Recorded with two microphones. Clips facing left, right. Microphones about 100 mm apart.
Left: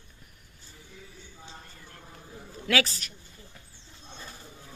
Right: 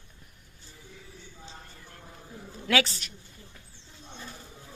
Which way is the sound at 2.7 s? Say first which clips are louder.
Right 1 dB; 20° right (ahead or behind).